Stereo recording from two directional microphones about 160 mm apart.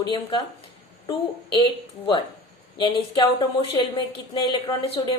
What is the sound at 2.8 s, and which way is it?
A woman's voice, 30° left (ahead or behind).